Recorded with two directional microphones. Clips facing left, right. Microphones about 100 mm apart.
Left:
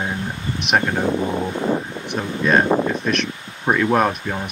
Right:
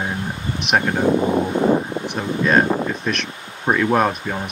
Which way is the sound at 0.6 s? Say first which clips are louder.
Even; centre (ahead or behind).